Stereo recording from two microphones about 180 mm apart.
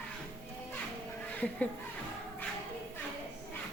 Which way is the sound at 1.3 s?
10° left (ahead or behind).